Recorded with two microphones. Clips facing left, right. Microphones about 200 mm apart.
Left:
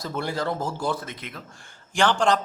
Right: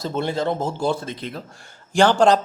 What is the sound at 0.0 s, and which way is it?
Speech, 25° right (ahead or behind).